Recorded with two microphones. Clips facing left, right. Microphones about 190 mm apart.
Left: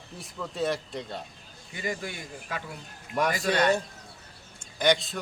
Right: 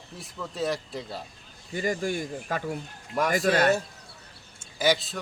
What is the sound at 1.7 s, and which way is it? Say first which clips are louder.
Speech: right 6 dB; 45° right (ahead or behind).